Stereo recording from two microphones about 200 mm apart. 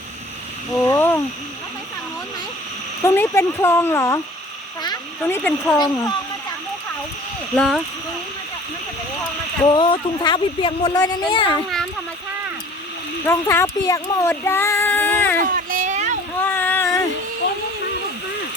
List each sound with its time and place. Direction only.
0.7 s speech: 10° left (ahead or behind)
3.0 s speech: 15° left (ahead or behind)
5.2 s speech: 5° left (ahead or behind)
5.7 s speech: 20° left (ahead or behind)
7.5 s speech: 5° left (ahead or behind)
9.6 s speech: 25° left (ahead or behind)
13.2 s speech: 15° left (ahead or behind)
15.4 s a sound: 45° right (ahead or behind)
16.4 s a sound: 10° left (ahead or behind)